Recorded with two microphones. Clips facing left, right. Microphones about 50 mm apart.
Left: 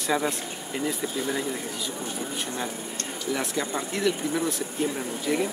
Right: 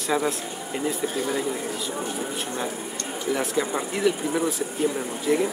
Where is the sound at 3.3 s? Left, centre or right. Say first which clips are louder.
Right 4 dB; centre.